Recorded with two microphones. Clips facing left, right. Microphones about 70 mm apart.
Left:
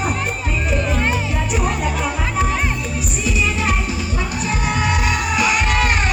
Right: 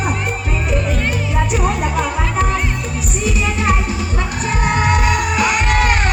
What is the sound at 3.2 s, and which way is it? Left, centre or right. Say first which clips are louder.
Music: right 2 dB; right.